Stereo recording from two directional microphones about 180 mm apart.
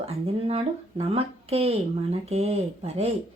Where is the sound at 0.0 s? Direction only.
35° right (ahead or behind).